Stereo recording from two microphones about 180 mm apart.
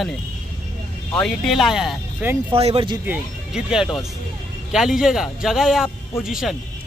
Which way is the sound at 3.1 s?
5° right (ahead or behind).